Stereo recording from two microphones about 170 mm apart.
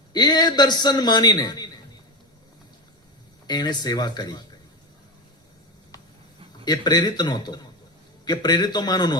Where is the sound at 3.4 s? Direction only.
25° left (ahead or behind).